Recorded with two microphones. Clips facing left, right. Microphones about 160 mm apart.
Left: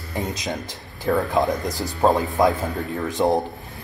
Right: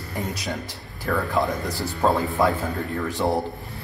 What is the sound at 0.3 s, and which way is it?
A man's voice, 20° left (ahead or behind).